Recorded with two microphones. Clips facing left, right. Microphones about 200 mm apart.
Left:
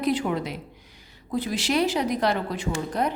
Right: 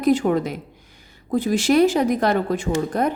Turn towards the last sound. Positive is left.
turn(degrees=-50)  # may be behind; listen again after turning